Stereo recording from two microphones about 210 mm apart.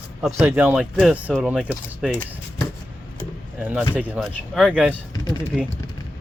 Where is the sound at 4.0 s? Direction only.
5° right (ahead or behind).